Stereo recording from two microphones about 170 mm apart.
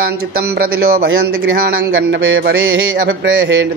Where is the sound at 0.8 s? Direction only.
65° right (ahead or behind).